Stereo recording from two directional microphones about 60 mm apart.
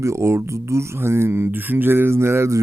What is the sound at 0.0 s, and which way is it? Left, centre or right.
Speech, right.